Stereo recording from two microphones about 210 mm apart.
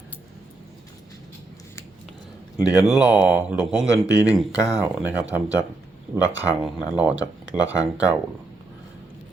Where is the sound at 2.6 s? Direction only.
15° left (ahead or behind).